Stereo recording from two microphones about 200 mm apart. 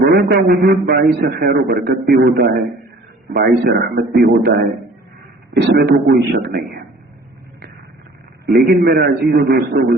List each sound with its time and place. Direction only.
0.0 s a man's voice: 50° right (ahead or behind)
8.5 s a man's voice: 50° right (ahead or behind)